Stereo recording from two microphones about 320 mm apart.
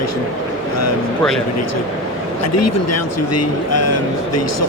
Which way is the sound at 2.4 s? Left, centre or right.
Left.